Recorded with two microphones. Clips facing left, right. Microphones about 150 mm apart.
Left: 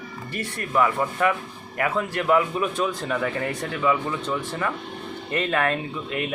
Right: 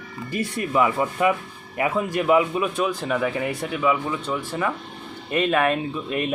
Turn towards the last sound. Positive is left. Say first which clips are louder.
# right 3 dB
turn(degrees=-20)  # may be behind; listen again after turning